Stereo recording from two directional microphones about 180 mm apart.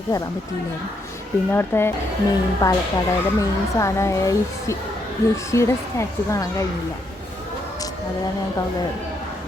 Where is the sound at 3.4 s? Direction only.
15° left (ahead or behind).